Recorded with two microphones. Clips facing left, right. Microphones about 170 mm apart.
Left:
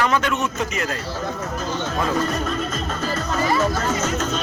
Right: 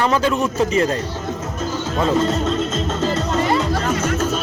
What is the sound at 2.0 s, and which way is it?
Music, 25° right (ahead or behind).